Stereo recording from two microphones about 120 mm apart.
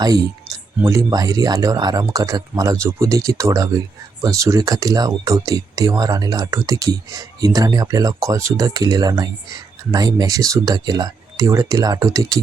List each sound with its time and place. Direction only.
0.8 s speech: 25° right (ahead or behind)